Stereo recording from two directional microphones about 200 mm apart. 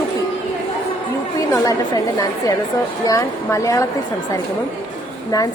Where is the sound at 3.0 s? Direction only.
15° left (ahead or behind).